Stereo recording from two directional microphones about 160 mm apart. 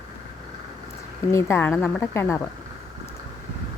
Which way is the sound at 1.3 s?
15° left (ahead or behind).